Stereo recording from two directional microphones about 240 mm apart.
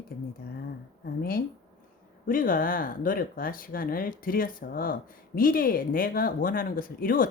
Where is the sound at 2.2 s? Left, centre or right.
Left.